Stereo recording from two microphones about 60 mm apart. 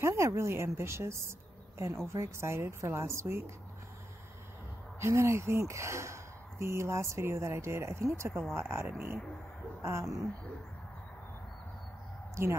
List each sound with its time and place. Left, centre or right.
0.0 s speech: right
5.0 s speech: right
8.8 s speech: right
9.8 s a sound: right
12.4 s speech: right